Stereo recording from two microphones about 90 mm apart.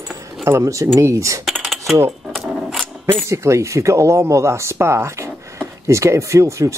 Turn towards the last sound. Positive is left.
turn(degrees=-35)  # may be behind; listen again after turning